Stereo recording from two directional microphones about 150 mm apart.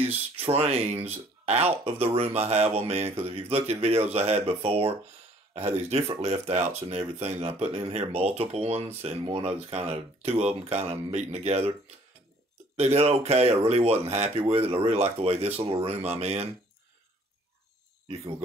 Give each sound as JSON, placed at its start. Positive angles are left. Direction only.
{"t": 0.4, "sound": "speech", "side_deg": -45}
{"t": 12.7, "sound": "speech", "side_deg": -45}